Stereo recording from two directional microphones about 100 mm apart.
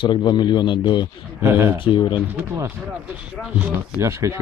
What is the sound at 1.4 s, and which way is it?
Speech, 25° right (ahead or behind).